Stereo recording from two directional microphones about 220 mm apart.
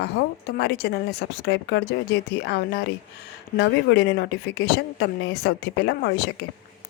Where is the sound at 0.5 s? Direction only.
45° left (ahead or behind).